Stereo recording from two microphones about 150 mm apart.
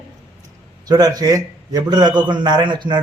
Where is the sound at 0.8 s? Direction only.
25° right (ahead or behind).